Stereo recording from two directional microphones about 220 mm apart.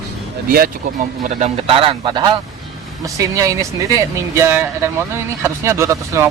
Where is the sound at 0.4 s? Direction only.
45° right (ahead or behind).